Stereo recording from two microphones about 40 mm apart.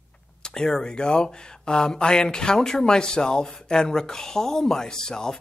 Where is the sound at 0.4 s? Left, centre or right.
Centre.